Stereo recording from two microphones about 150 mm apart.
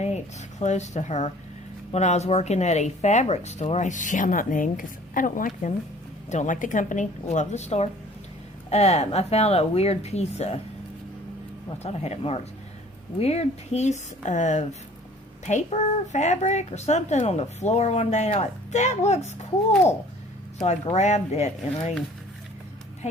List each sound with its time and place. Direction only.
0.6 s a woman's voice: 50° left (ahead or behind)
11.8 s a woman's voice: 45° left (ahead or behind)
20.6 s a woman's voice: 45° left (ahead or behind)